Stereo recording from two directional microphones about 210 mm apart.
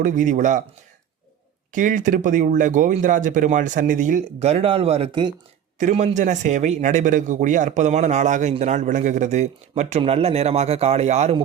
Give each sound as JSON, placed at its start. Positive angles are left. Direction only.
{"t": 0.0, "sound": "a man's voice", "side_deg": -35}
{"t": 1.7, "sound": "a man's voice", "side_deg": -40}